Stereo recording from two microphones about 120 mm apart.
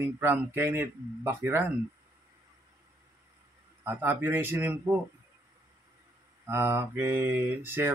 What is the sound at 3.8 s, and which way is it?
Speech, 15° right (ahead or behind).